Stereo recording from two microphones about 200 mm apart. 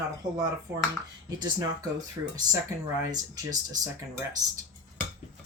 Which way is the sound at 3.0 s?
20° right (ahead or behind).